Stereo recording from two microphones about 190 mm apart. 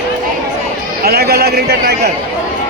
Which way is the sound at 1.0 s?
55° right (ahead or behind).